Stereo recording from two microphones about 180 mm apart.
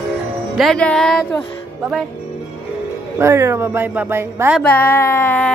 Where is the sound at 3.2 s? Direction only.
15° right (ahead or behind).